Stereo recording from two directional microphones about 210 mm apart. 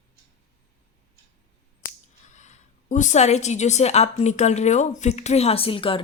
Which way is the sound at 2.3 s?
35° left (ahead or behind).